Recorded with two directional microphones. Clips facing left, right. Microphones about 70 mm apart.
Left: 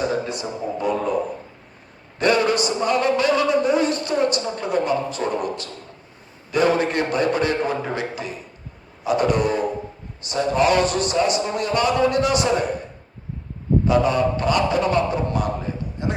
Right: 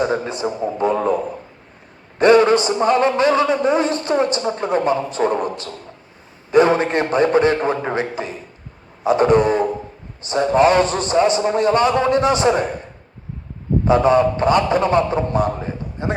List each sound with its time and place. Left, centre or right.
0.1 s a man's voice: right
2.1 s a man's voice: right
13.8 s a man's voice: right